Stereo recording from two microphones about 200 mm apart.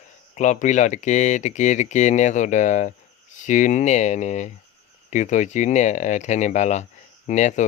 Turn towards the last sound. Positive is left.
turn(degrees=35)  # may be behind; listen again after turning